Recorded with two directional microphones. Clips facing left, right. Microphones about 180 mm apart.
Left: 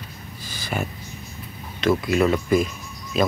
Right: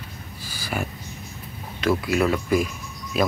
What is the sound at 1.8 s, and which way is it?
Speech, 5° right (ahead or behind).